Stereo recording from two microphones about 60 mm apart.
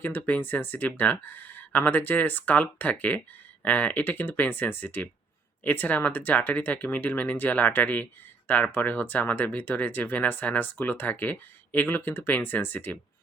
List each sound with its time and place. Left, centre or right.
0.0 s speech: left